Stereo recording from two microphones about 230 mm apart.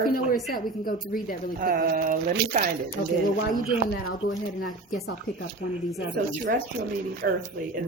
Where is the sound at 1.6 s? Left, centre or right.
Right.